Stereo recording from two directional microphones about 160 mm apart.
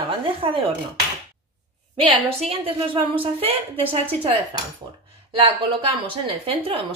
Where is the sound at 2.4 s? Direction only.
35° right (ahead or behind).